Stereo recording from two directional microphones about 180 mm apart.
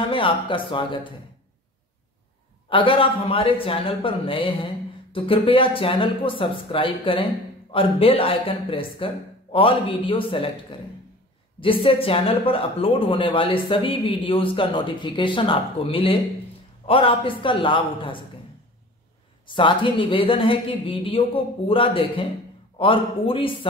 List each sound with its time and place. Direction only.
0.1 s speech: 30° left (ahead or behind)
2.7 s speech: 30° left (ahead or behind)
19.4 s speech: 25° left (ahead or behind)